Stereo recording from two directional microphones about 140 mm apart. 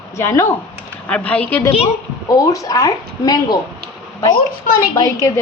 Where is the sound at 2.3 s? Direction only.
25° left (ahead or behind).